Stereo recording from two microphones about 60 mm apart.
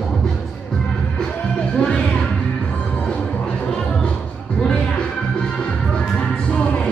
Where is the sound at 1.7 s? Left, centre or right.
Centre.